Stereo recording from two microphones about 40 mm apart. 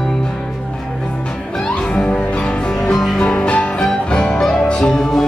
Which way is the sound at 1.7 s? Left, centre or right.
Left.